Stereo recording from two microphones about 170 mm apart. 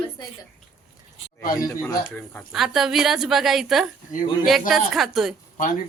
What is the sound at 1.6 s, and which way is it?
Speech, 20° left (ahead or behind).